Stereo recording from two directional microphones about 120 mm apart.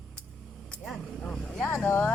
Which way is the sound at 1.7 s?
20° left (ahead or behind).